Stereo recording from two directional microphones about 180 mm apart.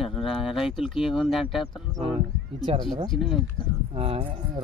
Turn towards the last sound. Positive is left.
turn(degrees=-30)  # may be behind; listen again after turning